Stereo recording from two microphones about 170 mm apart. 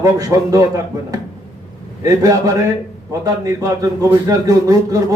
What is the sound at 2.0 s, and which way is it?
A man's voice, 20° right (ahead or behind).